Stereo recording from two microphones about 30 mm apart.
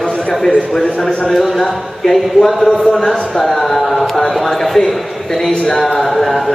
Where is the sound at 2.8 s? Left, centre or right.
Left.